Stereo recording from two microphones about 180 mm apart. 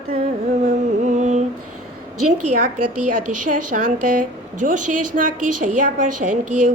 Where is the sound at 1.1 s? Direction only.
40° right (ahead or behind).